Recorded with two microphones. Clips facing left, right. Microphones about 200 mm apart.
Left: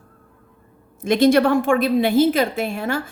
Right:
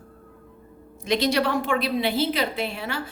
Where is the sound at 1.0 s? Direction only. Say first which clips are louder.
Left 8 dB; 50° left (ahead or behind).